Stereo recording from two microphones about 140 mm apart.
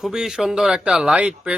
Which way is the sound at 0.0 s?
5° right (ahead or behind).